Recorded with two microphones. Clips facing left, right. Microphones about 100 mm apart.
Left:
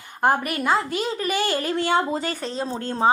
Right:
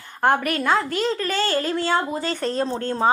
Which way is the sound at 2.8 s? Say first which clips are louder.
Left 1 dB; 20° left (ahead or behind).